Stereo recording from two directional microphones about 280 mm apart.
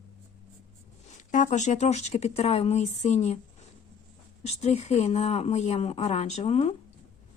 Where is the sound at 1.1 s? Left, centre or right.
Left.